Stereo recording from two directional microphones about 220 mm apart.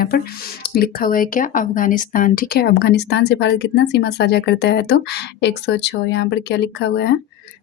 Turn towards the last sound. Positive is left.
turn(degrees=50)  # may be behind; listen again after turning